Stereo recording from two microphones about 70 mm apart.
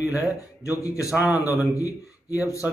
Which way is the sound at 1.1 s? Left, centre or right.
Right.